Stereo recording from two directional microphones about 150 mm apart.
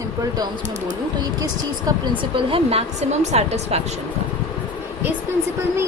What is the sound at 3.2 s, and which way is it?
Speech, 45° right (ahead or behind).